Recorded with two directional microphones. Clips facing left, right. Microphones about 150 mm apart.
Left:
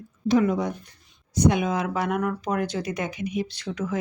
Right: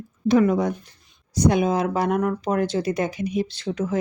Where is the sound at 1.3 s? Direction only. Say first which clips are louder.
Right 2 dB; 35° right (ahead or behind).